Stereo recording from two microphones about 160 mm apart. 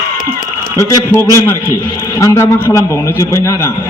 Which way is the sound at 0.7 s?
20° left (ahead or behind).